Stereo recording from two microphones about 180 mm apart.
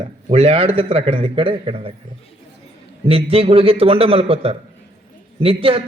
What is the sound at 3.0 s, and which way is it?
A man's voice, 30° right (ahead or behind).